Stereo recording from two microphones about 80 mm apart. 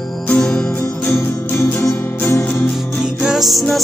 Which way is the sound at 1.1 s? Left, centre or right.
Left.